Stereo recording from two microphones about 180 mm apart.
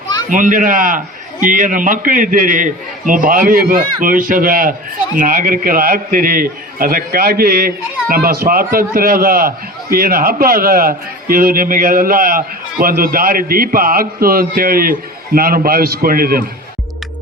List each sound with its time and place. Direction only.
0.3 s a man's voice: 50° right (ahead or behind)